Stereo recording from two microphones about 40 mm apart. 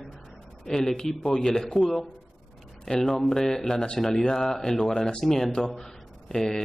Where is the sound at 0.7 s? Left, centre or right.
Centre.